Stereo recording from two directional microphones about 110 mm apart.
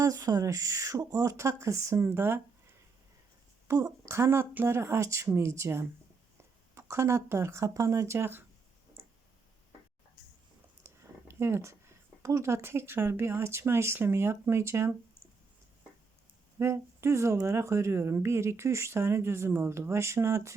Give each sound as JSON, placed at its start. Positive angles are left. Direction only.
{"t": 0.0, "sound": "speech", "side_deg": -30}
{"t": 3.7, "sound": "speech", "side_deg": -30}
{"t": 10.8, "sound": "speech", "side_deg": -25}
{"t": 16.6, "sound": "speech", "side_deg": -25}